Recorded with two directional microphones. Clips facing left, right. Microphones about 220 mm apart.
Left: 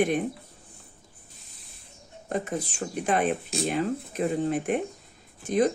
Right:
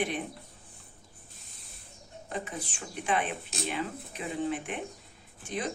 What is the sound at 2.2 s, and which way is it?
Speech, 45° left (ahead or behind).